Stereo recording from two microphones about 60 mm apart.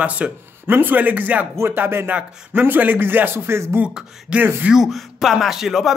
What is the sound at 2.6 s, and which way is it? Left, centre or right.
Speech, right.